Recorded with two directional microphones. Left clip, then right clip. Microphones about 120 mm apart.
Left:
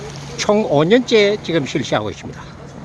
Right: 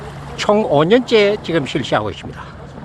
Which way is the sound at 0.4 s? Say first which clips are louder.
Right 1 dB; 5° left (ahead or behind).